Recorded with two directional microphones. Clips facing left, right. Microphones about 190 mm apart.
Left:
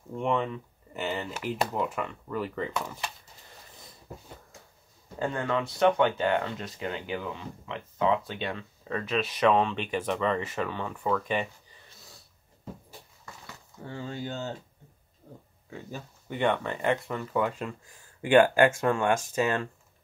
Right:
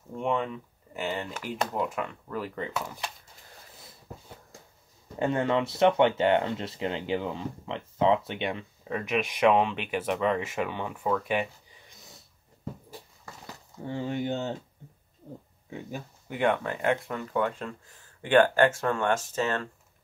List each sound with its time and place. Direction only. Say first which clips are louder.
0.1 s speech: left 1 dB; centre (ahead or behind)
5.2 s speech: right 3 dB; 20° right (ahead or behind)
11.9 s snort: right 1 dB; 20° right (ahead or behind)
13.8 s speech: right 6 dB; 20° right (ahead or behind)
15.7 s speech: right 2 dB; 10° right (ahead or behind); by 19.7 s 15° left (ahead or behind)